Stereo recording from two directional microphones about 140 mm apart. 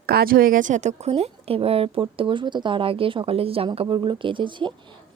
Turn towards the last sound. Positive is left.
turn(degrees=-35)  # may be behind; listen again after turning